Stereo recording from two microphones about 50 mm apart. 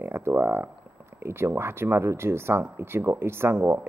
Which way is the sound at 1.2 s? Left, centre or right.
Right.